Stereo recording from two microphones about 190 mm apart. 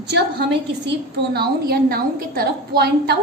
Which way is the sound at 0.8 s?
55° right (ahead or behind).